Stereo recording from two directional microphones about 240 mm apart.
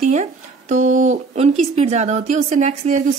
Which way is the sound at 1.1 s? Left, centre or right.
Right.